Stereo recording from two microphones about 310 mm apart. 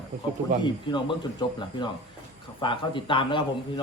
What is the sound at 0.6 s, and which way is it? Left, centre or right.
A man's voice, centre.